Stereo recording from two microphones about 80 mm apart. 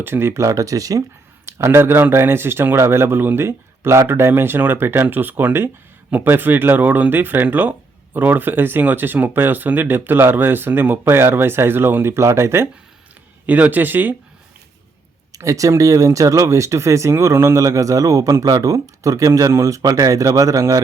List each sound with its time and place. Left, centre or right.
0.0 s speech: right
1.5 s speech: right
13.5 s speech: right
15.4 s speech: right